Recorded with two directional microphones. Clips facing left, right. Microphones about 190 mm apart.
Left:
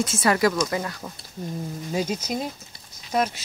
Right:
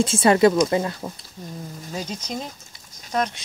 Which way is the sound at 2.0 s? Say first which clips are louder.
Left 4 dB; 10° left (ahead or behind).